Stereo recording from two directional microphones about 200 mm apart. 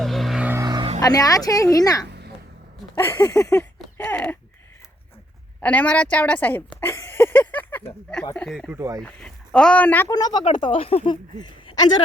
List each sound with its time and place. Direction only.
0.0 s vehicle: centre (ahead or behind); by 0.9 s 20° right (ahead or behind)
0.9 s speech: 20° left (ahead or behind)
2.0 s a sound: 55° right (ahead or behind)
2.9 s speech: 15° left (ahead or behind)
5.6 s speech: 5° left (ahead or behind)